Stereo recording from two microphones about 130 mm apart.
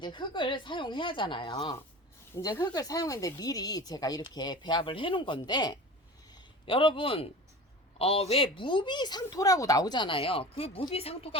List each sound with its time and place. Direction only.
0.0 s speech: 35° left (ahead or behind)